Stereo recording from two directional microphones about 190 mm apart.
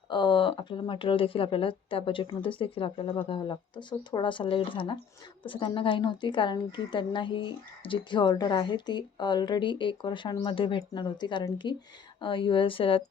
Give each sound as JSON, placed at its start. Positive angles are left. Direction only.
{"t": 0.1, "sound": "a woman's voice", "side_deg": 25}